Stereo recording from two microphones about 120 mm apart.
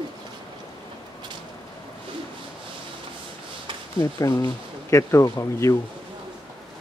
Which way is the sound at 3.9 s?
30° left (ahead or behind).